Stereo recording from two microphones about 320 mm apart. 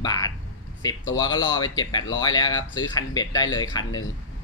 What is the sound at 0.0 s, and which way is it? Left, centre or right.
Speech, centre.